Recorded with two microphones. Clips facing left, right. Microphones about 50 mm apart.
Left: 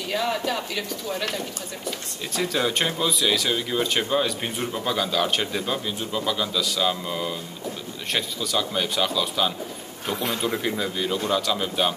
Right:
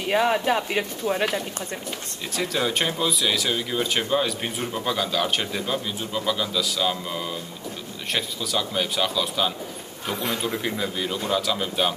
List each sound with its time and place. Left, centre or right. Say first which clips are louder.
0.0 s speech: right 4 dB; right
2.3 s speech: left 1 dB; centre